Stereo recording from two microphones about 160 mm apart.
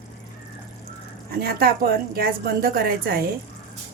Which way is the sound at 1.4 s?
75° right (ahead or behind).